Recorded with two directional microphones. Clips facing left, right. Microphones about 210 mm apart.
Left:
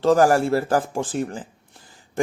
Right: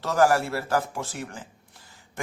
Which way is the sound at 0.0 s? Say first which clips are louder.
Left 5 dB; 35° left (ahead or behind).